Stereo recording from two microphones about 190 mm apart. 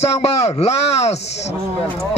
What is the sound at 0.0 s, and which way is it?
Speech, 35° left (ahead or behind).